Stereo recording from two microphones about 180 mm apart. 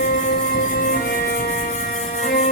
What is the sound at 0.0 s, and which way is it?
Music, 45° left (ahead or behind).